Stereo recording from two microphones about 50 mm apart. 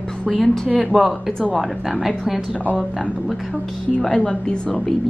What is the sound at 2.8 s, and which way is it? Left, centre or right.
A woman's voice, centre.